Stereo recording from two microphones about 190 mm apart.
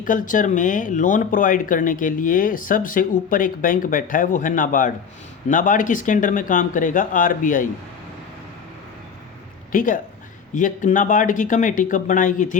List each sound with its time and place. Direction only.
0.0 s speech: 45° left (ahead or behind)
9.7 s speech: 45° left (ahead or behind)